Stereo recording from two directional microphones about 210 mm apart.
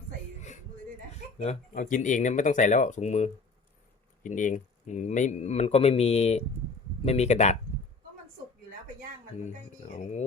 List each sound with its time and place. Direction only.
1.4 s speech: 35° left (ahead or behind)